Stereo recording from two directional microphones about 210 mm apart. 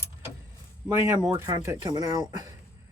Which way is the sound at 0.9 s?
15° right (ahead or behind).